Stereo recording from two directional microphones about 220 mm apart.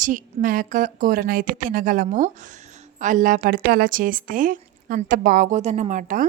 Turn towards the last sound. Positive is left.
turn(degrees=-35)  # may be behind; listen again after turning